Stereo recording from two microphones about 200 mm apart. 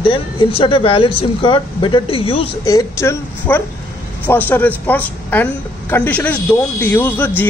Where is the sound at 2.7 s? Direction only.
15° left (ahead or behind).